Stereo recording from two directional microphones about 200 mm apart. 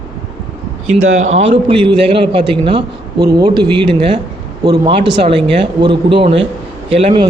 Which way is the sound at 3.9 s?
25° right (ahead or behind).